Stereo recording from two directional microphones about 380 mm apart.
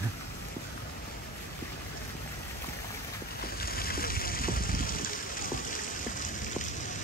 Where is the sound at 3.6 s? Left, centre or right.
Left.